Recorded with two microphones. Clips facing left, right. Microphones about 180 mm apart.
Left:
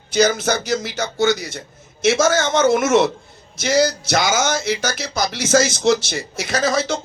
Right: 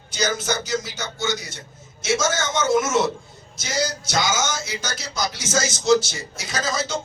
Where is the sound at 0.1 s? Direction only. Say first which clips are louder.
Left 7 dB; 65° left (ahead or behind).